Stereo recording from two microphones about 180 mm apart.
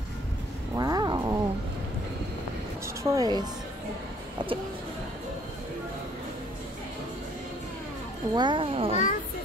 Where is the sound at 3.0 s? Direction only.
20° right (ahead or behind).